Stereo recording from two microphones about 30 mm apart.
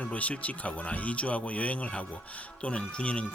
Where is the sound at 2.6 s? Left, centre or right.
Left.